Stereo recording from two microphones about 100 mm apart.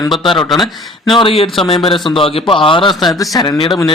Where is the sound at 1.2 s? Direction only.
75° left (ahead or behind).